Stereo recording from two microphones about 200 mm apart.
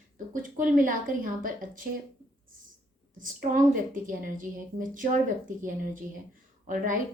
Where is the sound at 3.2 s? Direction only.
45° right (ahead or behind).